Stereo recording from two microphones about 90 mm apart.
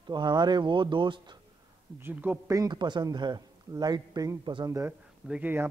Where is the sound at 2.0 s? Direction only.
20° right (ahead or behind).